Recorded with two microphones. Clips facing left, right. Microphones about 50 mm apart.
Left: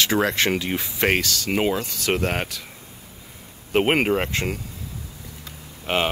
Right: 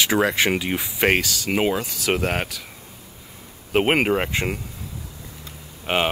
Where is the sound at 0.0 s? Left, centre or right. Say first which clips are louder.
Right 1 dB; centre.